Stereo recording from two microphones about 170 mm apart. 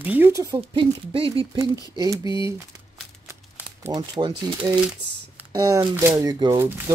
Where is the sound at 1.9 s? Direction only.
20° right (ahead or behind).